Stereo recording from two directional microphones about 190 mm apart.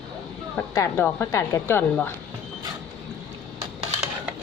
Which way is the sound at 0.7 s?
15° left (ahead or behind).